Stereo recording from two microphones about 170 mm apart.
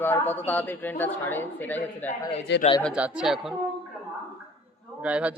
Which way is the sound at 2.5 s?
90° left.